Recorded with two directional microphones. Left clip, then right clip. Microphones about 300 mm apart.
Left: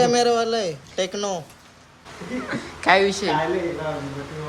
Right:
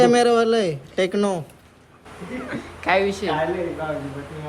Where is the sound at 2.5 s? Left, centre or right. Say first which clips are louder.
Left 3 dB; centre.